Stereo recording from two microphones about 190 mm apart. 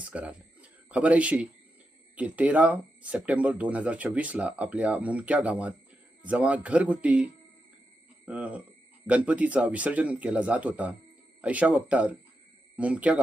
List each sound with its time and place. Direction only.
0.0 s speech: 5° right (ahead or behind)